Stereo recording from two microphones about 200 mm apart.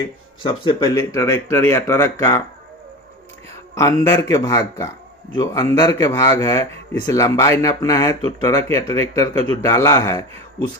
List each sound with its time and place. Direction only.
0.4 s speech: 20° left (ahead or behind)
3.8 s a man's voice: 15° left (ahead or behind)